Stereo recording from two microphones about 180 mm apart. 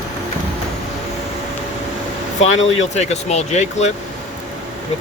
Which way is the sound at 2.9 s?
35° left (ahead or behind).